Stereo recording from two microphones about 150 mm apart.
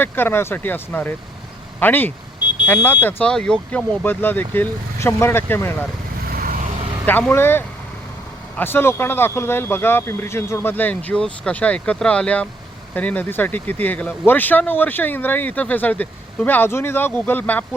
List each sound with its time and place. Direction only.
0.0 s speech: 15° left (ahead or behind)
6.3 s vehicle: 70° right (ahead or behind)
7.0 s speech: 10° left (ahead or behind)